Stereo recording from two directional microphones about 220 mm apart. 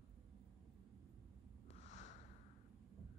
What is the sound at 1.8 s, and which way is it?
Snort, 30° left (ahead or behind).